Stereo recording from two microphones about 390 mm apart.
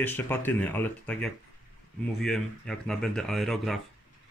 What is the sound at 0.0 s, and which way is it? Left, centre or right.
Speech, centre.